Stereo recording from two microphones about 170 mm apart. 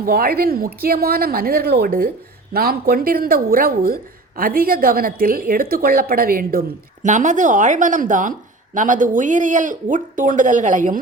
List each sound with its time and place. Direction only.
0.0 s speech: 60° right (ahead or behind)